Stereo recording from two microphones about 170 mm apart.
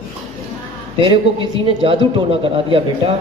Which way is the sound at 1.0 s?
30° right (ahead or behind).